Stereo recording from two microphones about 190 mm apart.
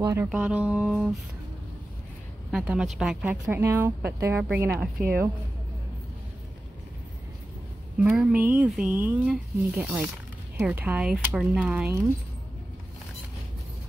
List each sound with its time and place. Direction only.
0.0 s speech: 15° right (ahead or behind)
2.5 s speech: 5° right (ahead or behind)
8.0 s speech: 5° right (ahead or behind)